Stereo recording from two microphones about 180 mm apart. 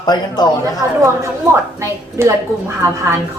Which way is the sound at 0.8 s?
15° right (ahead or behind).